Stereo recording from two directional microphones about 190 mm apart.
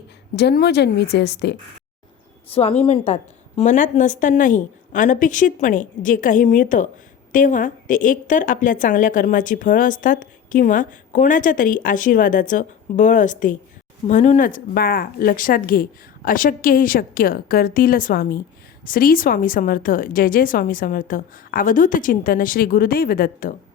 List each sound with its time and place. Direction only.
0.3 s a woman's voice: 60° left (ahead or behind)
2.5 s a woman's voice: 30° left (ahead or behind); by 23.6 s 50° left (ahead or behind)